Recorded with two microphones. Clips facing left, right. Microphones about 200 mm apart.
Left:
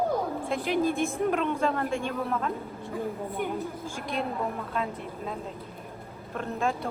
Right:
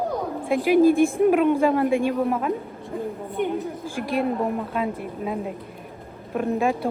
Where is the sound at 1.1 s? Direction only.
15° right (ahead or behind).